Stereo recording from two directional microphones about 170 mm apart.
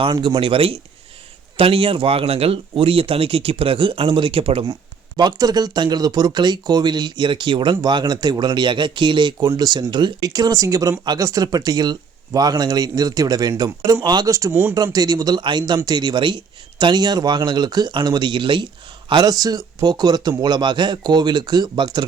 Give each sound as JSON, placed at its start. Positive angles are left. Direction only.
{"t": 0.0, "sound": "speech", "side_deg": -25}
{"t": 14.9, "sound": "speech", "side_deg": -20}